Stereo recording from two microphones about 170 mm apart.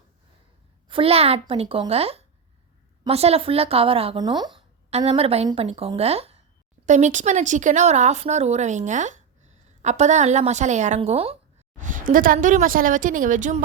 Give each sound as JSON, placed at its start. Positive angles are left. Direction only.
{"t": 0.9, "sound": "a woman's voice", "side_deg": -30}
{"t": 4.9, "sound": "a woman's voice", "side_deg": -35}
{"t": 11.8, "sound": "speech", "side_deg": -50}